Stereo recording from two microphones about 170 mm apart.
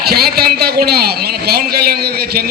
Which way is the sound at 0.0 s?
65° right (ahead or behind).